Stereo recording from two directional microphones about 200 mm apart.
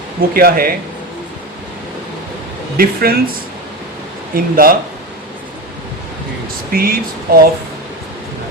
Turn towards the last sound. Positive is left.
turn(degrees=-45)  # may be behind; listen again after turning